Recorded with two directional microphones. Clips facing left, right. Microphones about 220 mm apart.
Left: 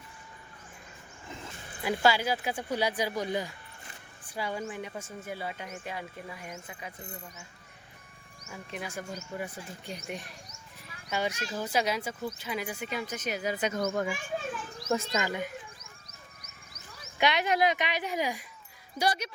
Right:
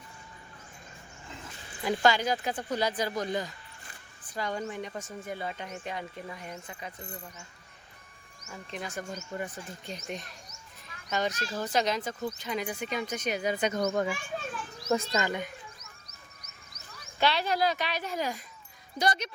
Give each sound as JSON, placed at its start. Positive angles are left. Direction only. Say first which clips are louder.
{"t": 1.8, "sound": "speech", "louder": "right 1 dB", "side_deg": 5}
{"t": 8.4, "sound": "speech", "louder": "even", "side_deg": 5}
{"t": 17.2, "sound": "speech", "louder": "left 1 dB", "side_deg": 15}